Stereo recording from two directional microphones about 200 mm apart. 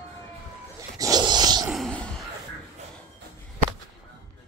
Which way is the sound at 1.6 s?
Centre (ahead or behind).